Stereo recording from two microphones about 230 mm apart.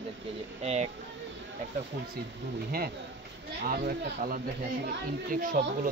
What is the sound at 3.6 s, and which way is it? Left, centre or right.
Speech, right.